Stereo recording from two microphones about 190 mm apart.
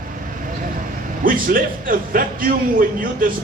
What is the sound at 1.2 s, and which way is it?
Speech, 45° right (ahead or behind).